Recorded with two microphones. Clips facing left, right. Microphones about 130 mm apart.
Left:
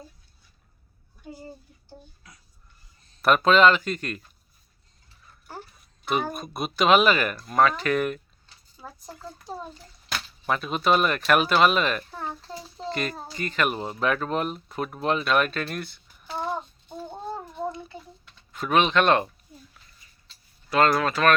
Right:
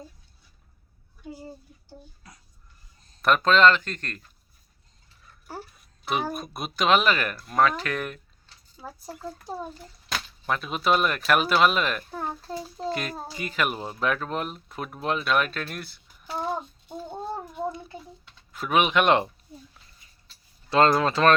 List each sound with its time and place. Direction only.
3.2 s speech: 5° left (ahead or behind)
6.1 s a child's voice: centre (ahead or behind)
9.5 s a child's voice: 5° right (ahead or behind)
18.5 s speech: 5° right (ahead or behind)
20.7 s speech: 25° right (ahead or behind)